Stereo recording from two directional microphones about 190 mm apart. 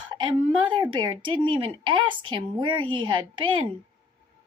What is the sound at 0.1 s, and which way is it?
Speech, 25° right (ahead or behind).